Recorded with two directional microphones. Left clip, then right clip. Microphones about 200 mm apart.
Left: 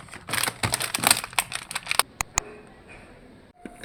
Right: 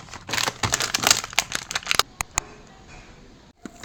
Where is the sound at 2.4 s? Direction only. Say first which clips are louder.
Even; centre (ahead or behind).